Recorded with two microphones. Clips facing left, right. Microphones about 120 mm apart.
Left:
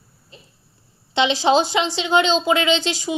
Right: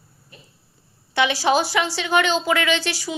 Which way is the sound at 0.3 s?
25° left (ahead or behind).